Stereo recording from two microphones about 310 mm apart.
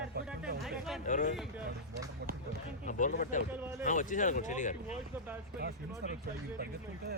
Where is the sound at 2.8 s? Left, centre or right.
Left.